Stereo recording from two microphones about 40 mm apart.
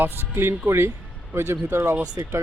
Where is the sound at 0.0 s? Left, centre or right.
Right.